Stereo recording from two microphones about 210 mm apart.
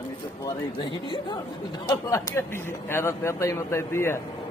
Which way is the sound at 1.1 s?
20° left (ahead or behind).